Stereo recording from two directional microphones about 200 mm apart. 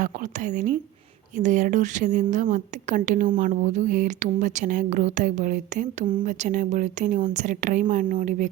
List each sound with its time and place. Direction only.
0.0 s a woman's voice: 40° right (ahead or behind)